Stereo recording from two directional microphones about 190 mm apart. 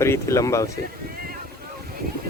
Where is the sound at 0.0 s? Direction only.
15° left (ahead or behind).